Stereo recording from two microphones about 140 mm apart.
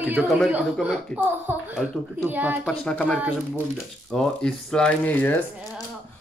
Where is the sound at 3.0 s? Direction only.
10° right (ahead or behind).